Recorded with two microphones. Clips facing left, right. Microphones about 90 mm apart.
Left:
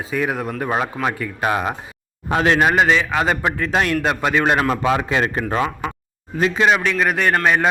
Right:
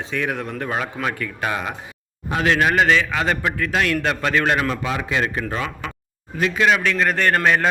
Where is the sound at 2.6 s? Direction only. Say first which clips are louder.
Left 1 dB; 20° left (ahead or behind).